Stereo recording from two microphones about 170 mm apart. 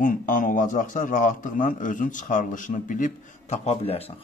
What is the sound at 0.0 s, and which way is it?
A man's voice, 55° left (ahead or behind).